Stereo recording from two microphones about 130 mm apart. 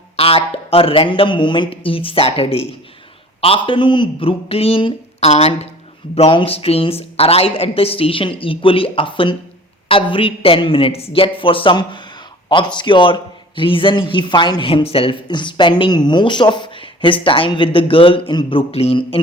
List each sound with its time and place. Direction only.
0.2 s a man's voice: 45° left (ahead or behind)